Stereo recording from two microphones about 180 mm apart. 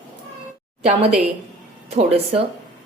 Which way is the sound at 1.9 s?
35° right (ahead or behind).